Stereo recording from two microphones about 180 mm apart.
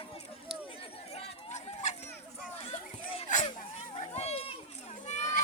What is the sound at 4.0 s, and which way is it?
Run, 35° left (ahead or behind).